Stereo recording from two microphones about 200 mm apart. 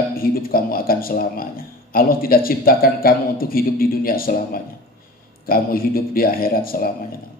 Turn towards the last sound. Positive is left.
turn(degrees=45)  # may be behind; listen again after turning